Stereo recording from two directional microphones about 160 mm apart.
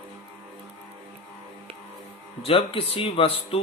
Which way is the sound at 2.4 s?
35° left (ahead or behind).